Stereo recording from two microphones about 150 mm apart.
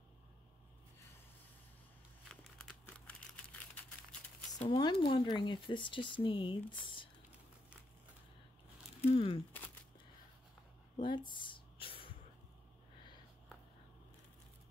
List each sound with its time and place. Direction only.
2.2 s crumpling: 5° left (ahead or behind)
4.6 s speech: 30° left (ahead or behind)
9.1 s speech: 40° left (ahead or behind)
11.0 s a sound: 30° left (ahead or behind)